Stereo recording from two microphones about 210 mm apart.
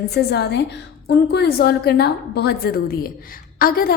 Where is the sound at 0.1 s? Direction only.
50° left (ahead or behind).